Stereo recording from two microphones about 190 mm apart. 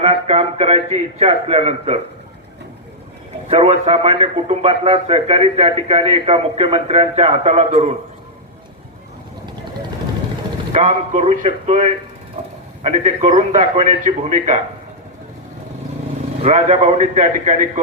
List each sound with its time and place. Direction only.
0.0 s a man's voice: 35° right (ahead or behind)
3.5 s a man's voice: 30° right (ahead or behind)
10.7 s a man's voice: 40° right (ahead or behind)
12.4 s a sound: 35° right (ahead or behind)
12.8 s a man's voice: 35° right (ahead or behind)
16.4 s a man's voice: 35° right (ahead or behind)